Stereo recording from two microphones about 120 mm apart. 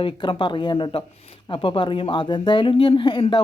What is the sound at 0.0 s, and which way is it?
A woman's voice, 40° left (ahead or behind).